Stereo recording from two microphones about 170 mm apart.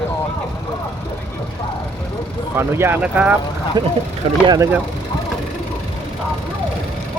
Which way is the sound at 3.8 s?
25° right (ahead or behind).